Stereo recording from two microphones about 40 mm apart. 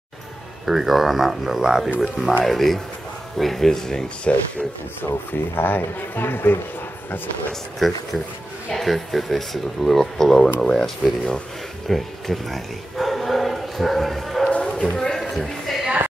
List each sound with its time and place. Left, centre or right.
0.7 s speech: centre
4.3 s speech: left
5.5 s speech: left
8.7 s speech: centre
11.9 s bow-wow: centre
14.6 s a sound: centre